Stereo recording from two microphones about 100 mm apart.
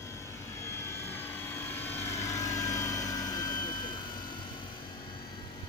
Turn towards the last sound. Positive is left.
turn(degrees=45)  # may be behind; listen again after turning